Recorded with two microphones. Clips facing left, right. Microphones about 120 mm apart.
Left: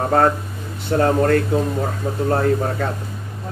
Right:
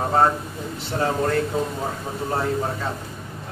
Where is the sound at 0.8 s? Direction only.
55° left (ahead or behind).